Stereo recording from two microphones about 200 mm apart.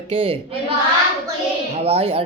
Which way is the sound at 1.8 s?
30° right (ahead or behind).